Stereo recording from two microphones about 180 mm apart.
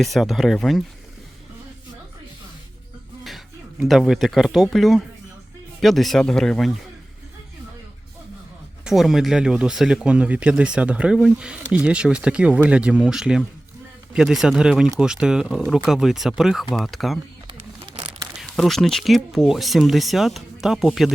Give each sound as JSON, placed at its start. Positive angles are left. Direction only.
{"t": 0.0, "sound": "speech", "side_deg": 0}
{"t": 3.8, "sound": "speech", "side_deg": 0}
{"t": 8.8, "sound": "speech", "side_deg": 0}
{"t": 18.3, "sound": "speech", "side_deg": 0}